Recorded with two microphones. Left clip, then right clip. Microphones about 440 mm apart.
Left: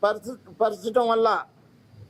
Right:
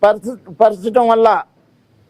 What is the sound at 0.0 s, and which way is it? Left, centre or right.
A man's voice, right.